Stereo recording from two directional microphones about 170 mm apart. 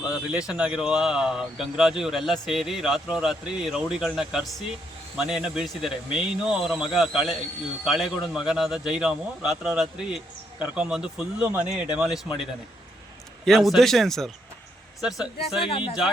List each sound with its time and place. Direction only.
0.1 s speech: 5° right (ahead or behind)
13.4 s speech: centre (ahead or behind)
15.6 s speech: 30° left (ahead or behind)